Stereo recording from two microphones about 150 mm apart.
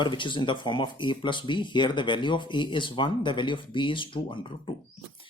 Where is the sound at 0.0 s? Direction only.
30° left (ahead or behind).